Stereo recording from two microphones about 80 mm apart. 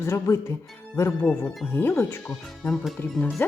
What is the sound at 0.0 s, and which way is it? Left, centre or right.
Speech, left.